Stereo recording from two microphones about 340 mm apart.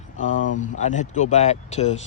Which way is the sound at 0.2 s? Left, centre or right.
Left.